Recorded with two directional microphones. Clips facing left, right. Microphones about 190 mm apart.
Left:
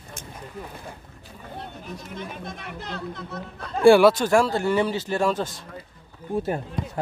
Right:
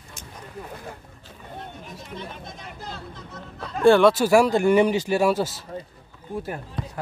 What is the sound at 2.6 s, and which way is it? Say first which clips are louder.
Speech: left 4 dB; 65° left (ahead or behind).